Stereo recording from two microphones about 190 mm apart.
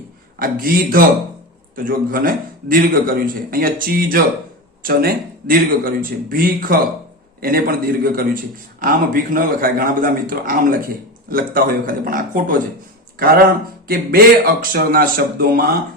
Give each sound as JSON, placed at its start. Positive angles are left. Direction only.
{"t": 0.3, "sound": "a man's voice", "side_deg": -50}